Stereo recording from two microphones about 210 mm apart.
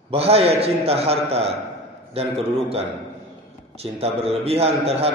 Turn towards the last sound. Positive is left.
turn(degrees=-30)  # may be behind; listen again after turning